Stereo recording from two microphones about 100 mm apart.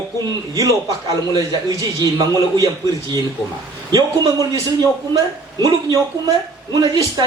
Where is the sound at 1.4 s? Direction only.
35° right (ahead or behind).